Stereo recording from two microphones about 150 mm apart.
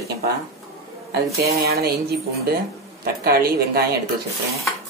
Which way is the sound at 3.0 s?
85° right.